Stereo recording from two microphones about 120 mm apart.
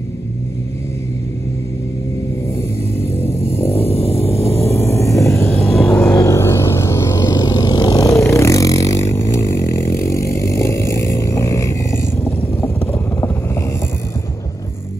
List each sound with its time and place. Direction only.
3.0 s a sound: 20° left (ahead or behind)
3.9 s vehicle: 55° left (ahead or behind)
4.4 s vehicle: 20° left (ahead or behind)
5.9 s music: 10° left (ahead or behind)
7.2 s vehicle: 35° left (ahead or behind); by 13.7 s 20° left (ahead or behind)